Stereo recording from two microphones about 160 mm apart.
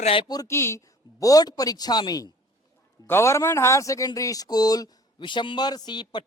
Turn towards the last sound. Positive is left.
turn(degrees=25)  # may be behind; listen again after turning